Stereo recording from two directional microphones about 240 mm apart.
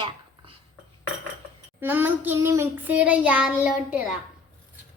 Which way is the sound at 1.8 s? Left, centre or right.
Centre.